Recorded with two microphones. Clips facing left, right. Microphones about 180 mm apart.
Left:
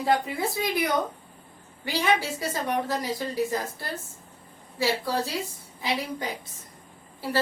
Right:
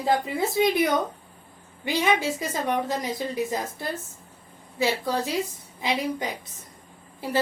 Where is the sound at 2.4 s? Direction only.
20° right (ahead or behind).